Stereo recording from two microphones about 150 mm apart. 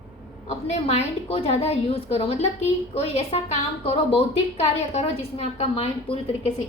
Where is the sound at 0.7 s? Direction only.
45° left (ahead or behind).